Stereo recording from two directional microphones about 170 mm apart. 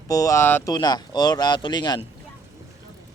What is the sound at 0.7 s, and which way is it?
Speech, 25° left (ahead or behind).